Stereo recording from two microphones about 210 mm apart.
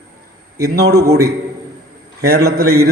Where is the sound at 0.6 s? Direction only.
45° right (ahead or behind).